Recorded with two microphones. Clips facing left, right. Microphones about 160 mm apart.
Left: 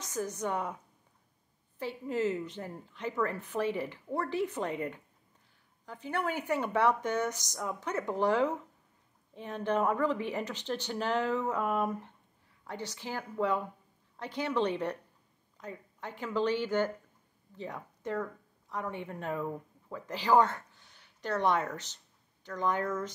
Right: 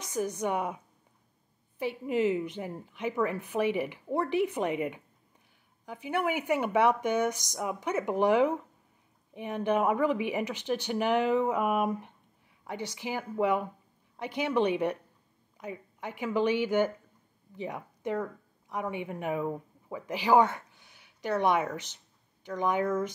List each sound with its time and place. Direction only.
0.0 s a woman's voice: 15° right (ahead or behind)
1.8 s a woman's voice: 15° right (ahead or behind)